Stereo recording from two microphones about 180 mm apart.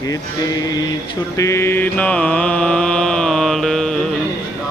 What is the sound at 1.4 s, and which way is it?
Mantra, 15° left (ahead or behind).